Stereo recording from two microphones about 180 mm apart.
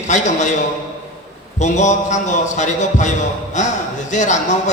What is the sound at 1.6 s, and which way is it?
A man's voice, 40° left (ahead or behind).